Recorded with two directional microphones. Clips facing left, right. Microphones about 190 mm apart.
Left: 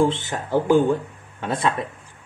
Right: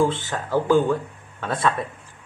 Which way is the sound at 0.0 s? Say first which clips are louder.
Left 1 dB; 20° left (ahead or behind).